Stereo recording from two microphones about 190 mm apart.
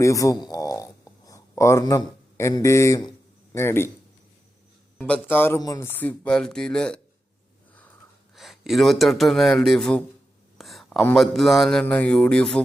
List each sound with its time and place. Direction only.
0.0 s a sound: 15° left (ahead or behind)
3.5 s speech: 15° left (ahead or behind)
4.9 s speech: 5° left (ahead or behind)
8.4 s a man's voice: centre (ahead or behind)